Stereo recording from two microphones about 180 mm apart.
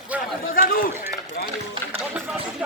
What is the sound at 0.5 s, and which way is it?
Speech, 55° left (ahead or behind).